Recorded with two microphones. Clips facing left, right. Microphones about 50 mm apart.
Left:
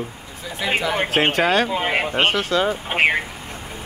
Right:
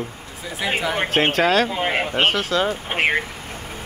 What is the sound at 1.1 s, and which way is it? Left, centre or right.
Speech, centre.